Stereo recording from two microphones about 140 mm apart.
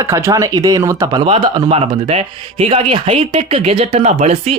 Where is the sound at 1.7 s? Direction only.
50° right (ahead or behind).